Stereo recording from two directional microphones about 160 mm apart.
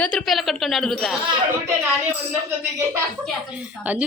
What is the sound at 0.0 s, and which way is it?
Speech, 5° left (ahead or behind).